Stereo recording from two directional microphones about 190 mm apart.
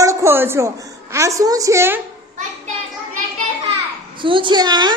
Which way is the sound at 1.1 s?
15° right (ahead or behind).